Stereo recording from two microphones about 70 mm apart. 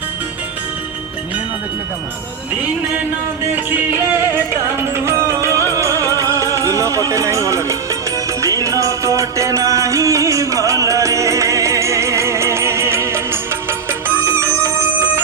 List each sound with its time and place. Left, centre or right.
3.5 s music: right
4.9 s music: right